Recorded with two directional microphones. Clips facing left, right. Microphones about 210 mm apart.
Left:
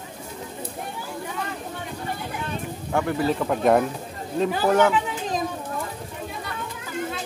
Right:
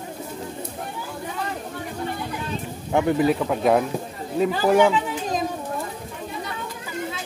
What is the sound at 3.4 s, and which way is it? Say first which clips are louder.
Speech: even; centre (ahead or behind).